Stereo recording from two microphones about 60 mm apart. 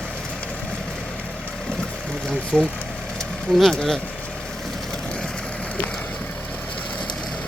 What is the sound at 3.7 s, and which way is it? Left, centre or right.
Speech, centre.